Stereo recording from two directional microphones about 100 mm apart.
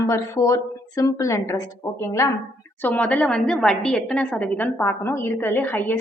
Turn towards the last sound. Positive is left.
turn(degrees=20)  # may be behind; listen again after turning